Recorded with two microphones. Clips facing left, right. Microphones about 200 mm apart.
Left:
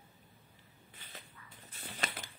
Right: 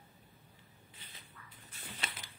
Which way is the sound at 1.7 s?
45° left (ahead or behind).